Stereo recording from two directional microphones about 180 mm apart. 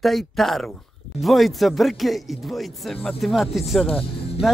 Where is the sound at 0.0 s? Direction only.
Centre (ahead or behind).